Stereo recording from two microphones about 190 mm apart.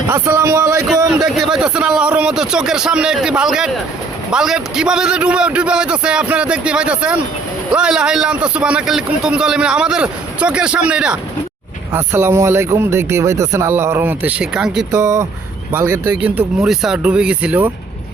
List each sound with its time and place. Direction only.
0.1 s speech: 15° right (ahead or behind)
1.1 s a man's voice: 5° right (ahead or behind)
14.9 s speech: 15° right (ahead or behind)